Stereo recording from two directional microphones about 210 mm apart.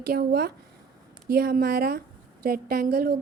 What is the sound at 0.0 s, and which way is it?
A woman's voice, 45° right (ahead or behind).